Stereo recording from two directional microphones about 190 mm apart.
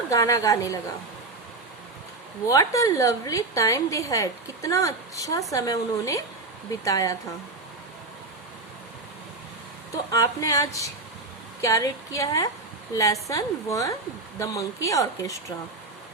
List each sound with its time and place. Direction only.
0.1 s a woman's voice: 15° left (ahead or behind)
2.5 s a woman's voice: 15° left (ahead or behind)
10.1 s a woman's voice: 15° left (ahead or behind)